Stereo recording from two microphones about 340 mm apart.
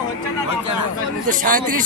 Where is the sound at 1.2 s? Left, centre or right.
Right.